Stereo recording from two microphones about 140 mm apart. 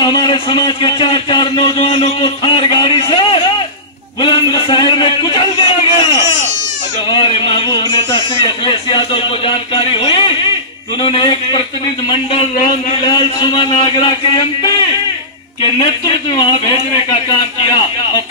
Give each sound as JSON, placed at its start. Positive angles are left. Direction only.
{"t": 0.0, "sound": "a sound", "side_deg": 35}
{"t": 7.1, "sound": "speech", "side_deg": 35}
{"t": 15.8, "sound": "speech", "side_deg": 35}